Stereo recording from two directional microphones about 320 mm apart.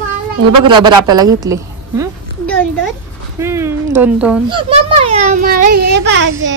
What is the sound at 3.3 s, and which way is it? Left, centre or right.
A child's voice, centre.